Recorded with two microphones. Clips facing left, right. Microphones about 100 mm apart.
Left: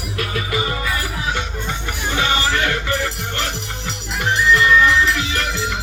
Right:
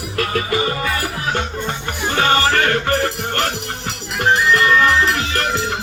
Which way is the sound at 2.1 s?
45° right (ahead or behind).